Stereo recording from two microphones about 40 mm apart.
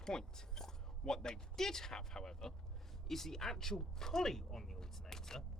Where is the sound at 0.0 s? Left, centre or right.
Centre.